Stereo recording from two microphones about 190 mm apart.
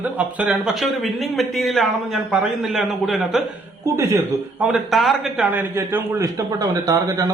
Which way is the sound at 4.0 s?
15° right (ahead or behind).